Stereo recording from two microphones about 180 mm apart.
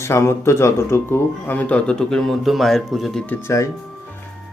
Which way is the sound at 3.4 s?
15° left (ahead or behind).